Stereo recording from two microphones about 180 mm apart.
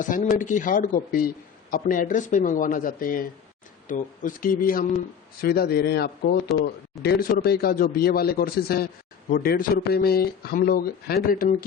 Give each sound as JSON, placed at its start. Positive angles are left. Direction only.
{"t": 0.0, "sound": "speech", "side_deg": 45}